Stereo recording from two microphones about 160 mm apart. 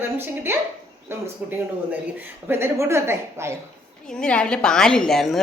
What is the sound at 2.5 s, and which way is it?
A woman's voice, 15° right (ahead or behind).